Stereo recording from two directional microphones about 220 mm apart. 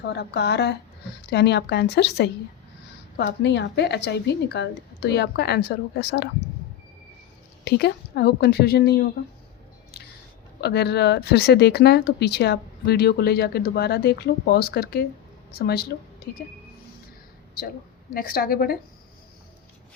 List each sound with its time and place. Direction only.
0.0 s speech: 50° left (ahead or behind)
7.6 s speech: 50° left (ahead or behind)
10.6 s a woman's voice: 50° left (ahead or behind)
18.1 s speech: 40° left (ahead or behind)